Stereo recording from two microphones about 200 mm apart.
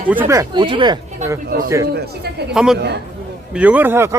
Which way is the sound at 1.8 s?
50° right (ahead or behind).